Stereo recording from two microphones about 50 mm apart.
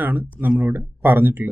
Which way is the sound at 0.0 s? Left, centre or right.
Right.